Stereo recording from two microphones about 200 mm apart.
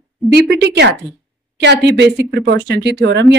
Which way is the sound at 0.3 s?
60° right (ahead or behind).